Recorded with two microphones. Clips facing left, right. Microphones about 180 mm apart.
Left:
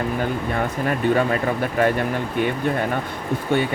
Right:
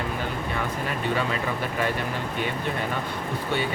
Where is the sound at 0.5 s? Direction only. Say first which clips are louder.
Left 6 dB; 50° left (ahead or behind).